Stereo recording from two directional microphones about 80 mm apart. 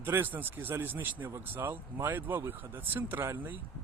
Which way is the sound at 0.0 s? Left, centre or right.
Right.